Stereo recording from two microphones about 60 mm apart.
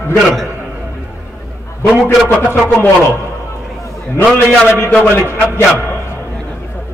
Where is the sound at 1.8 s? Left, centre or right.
Left.